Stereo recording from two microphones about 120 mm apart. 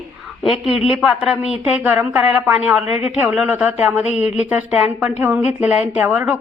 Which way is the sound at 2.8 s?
60° left (ahead or behind).